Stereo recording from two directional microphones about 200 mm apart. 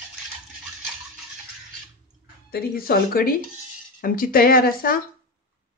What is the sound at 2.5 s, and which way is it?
Speech, 50° left (ahead or behind).